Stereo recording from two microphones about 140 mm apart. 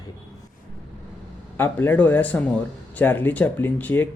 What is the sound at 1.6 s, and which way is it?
Speech, 15° left (ahead or behind).